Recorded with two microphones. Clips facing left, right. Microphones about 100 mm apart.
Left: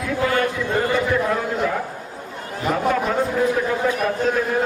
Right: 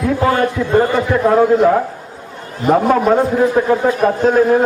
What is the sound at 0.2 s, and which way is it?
A man's voice, 35° right (ahead or behind).